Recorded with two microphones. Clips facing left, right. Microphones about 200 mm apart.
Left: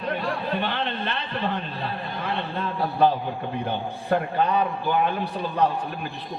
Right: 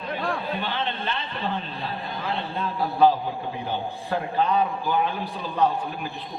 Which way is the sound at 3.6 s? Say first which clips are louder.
Left 1 dB; 60° left (ahead or behind).